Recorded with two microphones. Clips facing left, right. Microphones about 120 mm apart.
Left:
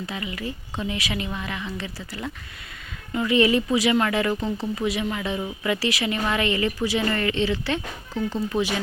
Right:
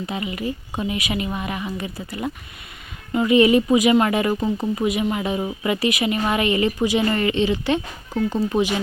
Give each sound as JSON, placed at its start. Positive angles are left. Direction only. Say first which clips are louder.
{"t": 0.0, "sound": "speech", "louder": "right 5 dB", "side_deg": -20}